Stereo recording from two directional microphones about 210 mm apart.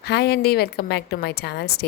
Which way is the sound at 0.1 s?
50° left (ahead or behind).